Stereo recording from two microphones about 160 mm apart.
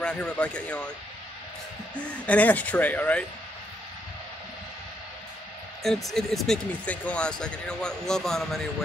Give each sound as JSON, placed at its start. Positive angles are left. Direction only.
{"t": 0.0, "sound": "speech", "side_deg": 5}
{"t": 2.0, "sound": "speech", "side_deg": 5}
{"t": 5.8, "sound": "speech", "side_deg": 0}